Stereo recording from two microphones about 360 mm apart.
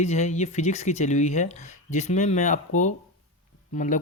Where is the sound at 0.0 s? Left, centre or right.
Centre.